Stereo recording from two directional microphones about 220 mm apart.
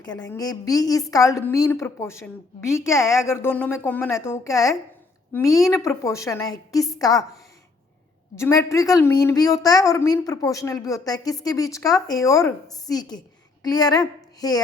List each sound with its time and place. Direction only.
0.0 s a woman's voice: 20° left (ahead or behind)
8.4 s a woman's voice: 15° left (ahead or behind)